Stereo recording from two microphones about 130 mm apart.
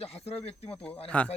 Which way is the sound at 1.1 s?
10° left (ahead or behind).